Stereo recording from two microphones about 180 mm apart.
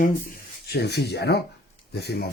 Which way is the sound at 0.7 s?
65° left (ahead or behind).